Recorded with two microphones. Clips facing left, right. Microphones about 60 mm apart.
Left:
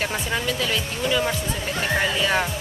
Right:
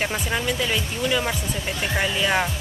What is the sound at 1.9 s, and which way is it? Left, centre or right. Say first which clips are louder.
Speech: even; centre.